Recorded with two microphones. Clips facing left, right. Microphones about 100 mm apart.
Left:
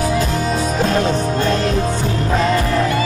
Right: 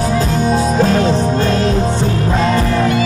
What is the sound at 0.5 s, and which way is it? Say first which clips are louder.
Music: right 4 dB; 35° right (ahead or behind).